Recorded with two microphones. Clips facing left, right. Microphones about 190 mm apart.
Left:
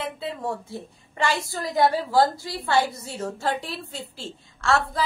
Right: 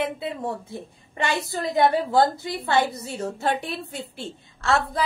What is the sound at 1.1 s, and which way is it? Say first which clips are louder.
A woman's voice: even; 20° right (ahead or behind).